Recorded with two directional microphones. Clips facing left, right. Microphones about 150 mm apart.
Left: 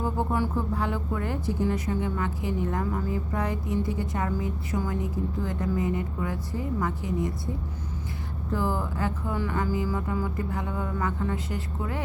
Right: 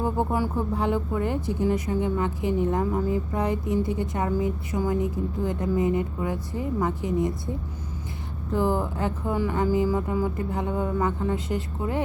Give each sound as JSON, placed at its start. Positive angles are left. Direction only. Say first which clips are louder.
{"t": 0.0, "sound": "speech", "louder": "right 2 dB", "side_deg": -15}
{"t": 8.5, "sound": "speech", "louder": "right 4 dB", "side_deg": -20}